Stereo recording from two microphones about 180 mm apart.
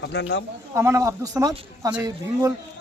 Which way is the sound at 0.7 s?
15° right (ahead or behind).